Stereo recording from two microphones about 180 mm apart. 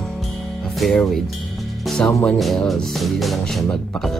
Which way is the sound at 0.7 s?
Centre (ahead or behind).